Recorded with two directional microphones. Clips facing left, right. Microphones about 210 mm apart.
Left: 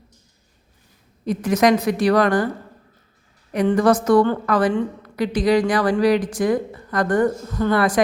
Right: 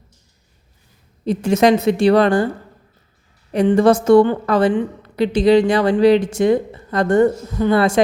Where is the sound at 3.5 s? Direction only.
25° right (ahead or behind).